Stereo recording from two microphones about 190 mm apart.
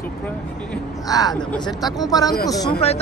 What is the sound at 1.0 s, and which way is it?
Speech, 20° left (ahead or behind).